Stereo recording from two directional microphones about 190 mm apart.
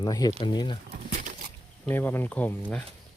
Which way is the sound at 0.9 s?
50° right (ahead or behind).